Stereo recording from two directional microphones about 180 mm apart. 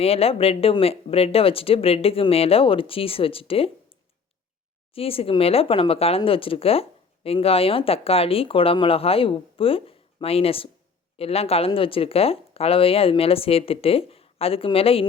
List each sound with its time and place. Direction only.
0.0 s speech: 35° left (ahead or behind)
4.9 s speech: 30° left (ahead or behind)